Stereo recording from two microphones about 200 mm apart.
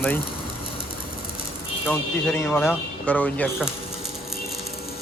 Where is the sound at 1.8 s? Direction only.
10° left (ahead or behind).